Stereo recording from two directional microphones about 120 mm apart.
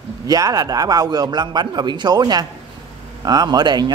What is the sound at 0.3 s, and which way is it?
A man's voice, 30° right (ahead or behind).